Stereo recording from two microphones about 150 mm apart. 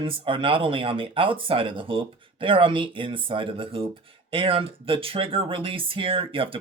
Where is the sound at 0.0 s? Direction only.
35° right (ahead or behind).